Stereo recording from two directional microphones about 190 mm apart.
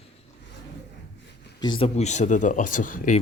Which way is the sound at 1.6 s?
25° left (ahead or behind).